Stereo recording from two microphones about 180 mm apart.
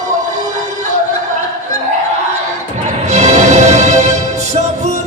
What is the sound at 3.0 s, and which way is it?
Music, 40° right (ahead or behind).